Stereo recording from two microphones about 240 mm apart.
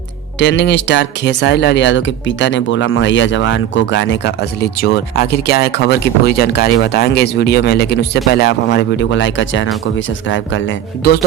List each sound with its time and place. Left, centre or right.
0.3 s speech: left